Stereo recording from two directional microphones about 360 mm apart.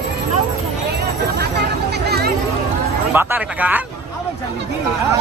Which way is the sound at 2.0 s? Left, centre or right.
Right.